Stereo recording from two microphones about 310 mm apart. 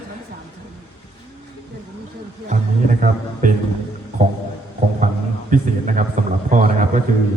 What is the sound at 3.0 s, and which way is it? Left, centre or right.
Speech, right.